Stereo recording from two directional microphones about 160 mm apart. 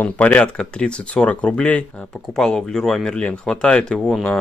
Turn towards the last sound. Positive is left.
turn(degrees=5)  # may be behind; listen again after turning